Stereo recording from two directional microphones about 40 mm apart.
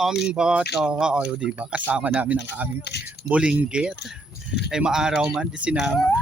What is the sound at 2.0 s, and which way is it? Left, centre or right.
Speech, right.